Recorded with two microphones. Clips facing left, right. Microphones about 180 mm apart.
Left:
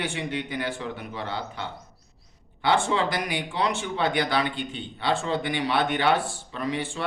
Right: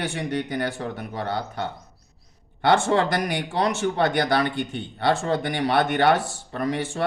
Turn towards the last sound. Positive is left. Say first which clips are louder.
# right 3 dB
turn(degrees=-50)  # may be behind; listen again after turning